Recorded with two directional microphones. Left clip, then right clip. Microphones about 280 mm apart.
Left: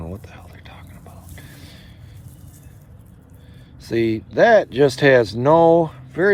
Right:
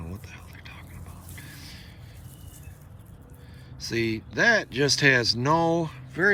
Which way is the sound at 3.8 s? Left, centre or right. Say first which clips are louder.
Left 7 dB; left.